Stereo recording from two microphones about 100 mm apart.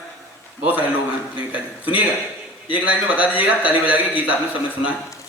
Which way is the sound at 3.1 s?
15° right (ahead or behind).